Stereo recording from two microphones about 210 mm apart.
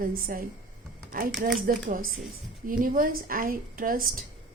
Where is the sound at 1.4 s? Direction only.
40° right (ahead or behind).